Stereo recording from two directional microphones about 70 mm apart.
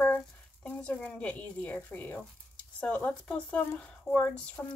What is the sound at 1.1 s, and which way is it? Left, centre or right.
Speech, left.